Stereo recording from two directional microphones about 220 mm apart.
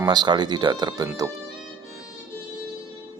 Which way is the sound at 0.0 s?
20° right (ahead or behind).